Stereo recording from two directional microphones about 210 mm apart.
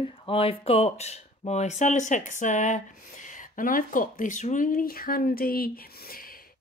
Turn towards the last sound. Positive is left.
turn(degrees=45)  # may be behind; listen again after turning